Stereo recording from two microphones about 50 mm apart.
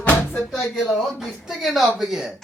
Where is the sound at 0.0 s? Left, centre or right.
Left.